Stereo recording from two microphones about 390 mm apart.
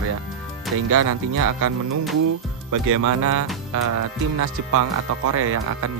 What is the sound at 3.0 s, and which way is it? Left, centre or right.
Speech, right.